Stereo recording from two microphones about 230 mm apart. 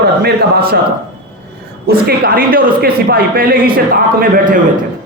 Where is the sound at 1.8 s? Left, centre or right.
Right.